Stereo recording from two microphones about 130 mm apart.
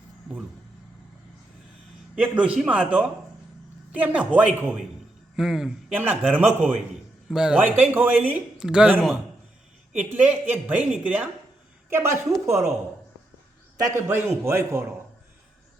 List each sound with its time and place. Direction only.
2.1 s a man's voice: 10° right (ahead or behind)
5.9 s a man's voice: 15° right (ahead or behind)
13.7 s a man's voice: 25° right (ahead or behind)